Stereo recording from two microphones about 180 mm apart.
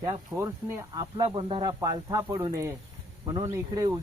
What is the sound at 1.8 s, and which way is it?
Speech, 20° right (ahead or behind).